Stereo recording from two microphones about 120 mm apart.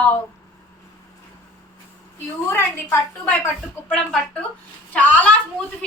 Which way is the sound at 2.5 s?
20° left (ahead or behind).